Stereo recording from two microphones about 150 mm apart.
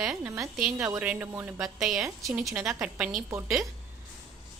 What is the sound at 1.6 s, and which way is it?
A woman's voice, centre (ahead or behind).